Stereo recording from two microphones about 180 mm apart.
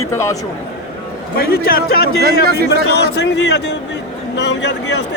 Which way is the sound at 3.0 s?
70° left (ahead or behind).